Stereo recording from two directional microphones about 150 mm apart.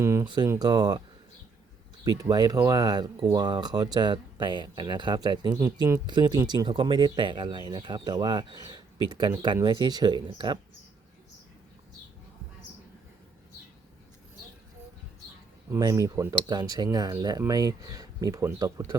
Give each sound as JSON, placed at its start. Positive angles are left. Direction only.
{"t": 0.0, "sound": "a sound", "side_deg": -20}
{"t": 0.4, "sound": "speech", "side_deg": -25}
{"t": 2.0, "sound": "speech", "side_deg": -25}
{"t": 15.7, "sound": "speech", "side_deg": -20}